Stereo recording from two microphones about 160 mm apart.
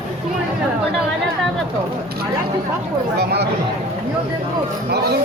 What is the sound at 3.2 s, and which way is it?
Speech, 90° right.